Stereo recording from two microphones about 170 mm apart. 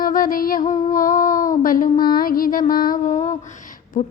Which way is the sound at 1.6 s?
55° left (ahead or behind).